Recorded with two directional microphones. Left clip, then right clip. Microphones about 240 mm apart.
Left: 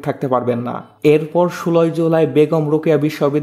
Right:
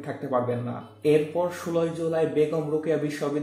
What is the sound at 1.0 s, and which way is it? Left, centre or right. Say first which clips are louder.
Speech: left 9 dB; left.